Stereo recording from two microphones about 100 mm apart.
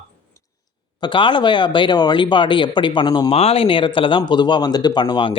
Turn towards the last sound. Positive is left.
turn(degrees=55)  # may be behind; listen again after turning